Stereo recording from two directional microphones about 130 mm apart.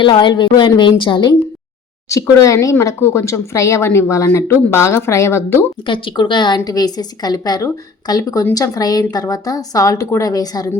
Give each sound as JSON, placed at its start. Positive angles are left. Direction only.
{"t": 0.0, "sound": "a woman's voice", "side_deg": 35}
{"t": 2.0, "sound": "speech", "side_deg": 25}
{"t": 5.8, "sound": "a woman's voice", "side_deg": 40}